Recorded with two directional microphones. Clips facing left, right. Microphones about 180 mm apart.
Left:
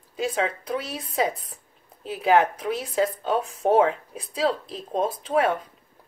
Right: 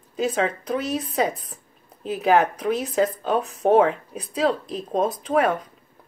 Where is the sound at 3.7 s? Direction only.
25° right (ahead or behind).